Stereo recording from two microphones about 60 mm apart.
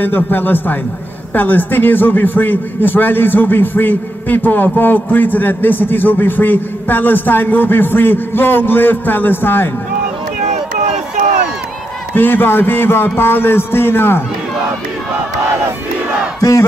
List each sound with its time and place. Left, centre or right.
0.0 s a man's voice: left
12.2 s a man's voice: left
16.3 s battle cry: left